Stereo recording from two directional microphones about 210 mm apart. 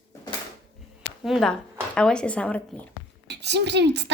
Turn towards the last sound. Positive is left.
turn(degrees=-55)  # may be behind; listen again after turning